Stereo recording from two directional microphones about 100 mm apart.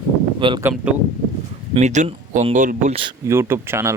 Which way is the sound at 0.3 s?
55° right (ahead or behind).